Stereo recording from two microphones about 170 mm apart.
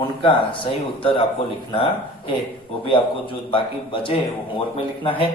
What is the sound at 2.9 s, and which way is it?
Speech, 30° left (ahead or behind).